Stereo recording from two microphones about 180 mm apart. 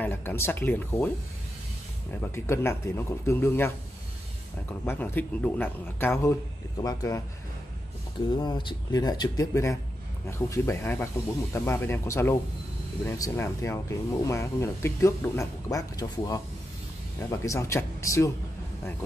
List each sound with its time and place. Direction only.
0.0 s speech: 10° left (ahead or behind)
2.3 s speech: 15° left (ahead or behind)
4.8 s speech: 10° left (ahead or behind)
8.3 s speech: 25° left (ahead or behind)